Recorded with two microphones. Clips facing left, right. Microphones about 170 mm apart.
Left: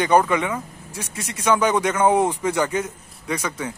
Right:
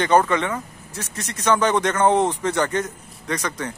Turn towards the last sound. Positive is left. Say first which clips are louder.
# even
turn(degrees=10)  # may be behind; listen again after turning